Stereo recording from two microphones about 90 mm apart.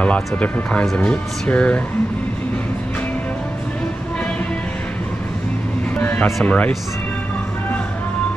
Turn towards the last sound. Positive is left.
turn(degrees=15)  # may be behind; listen again after turning